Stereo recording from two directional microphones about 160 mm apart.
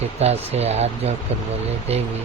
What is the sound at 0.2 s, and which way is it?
Speech, 40° right (ahead or behind).